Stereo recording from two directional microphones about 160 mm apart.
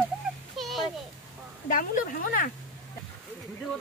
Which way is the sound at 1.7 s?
60° left (ahead or behind).